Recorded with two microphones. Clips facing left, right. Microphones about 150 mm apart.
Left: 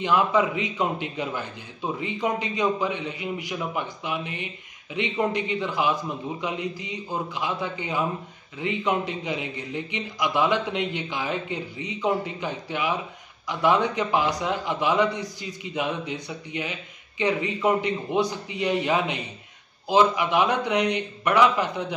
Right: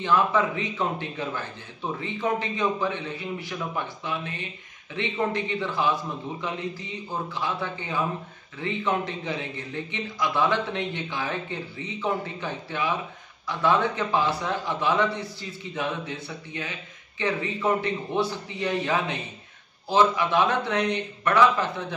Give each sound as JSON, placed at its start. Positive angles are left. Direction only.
{"t": 0.0, "sound": "a man's voice", "side_deg": 15}